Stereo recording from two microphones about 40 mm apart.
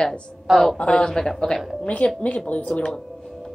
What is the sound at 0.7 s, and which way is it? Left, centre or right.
Speech, left.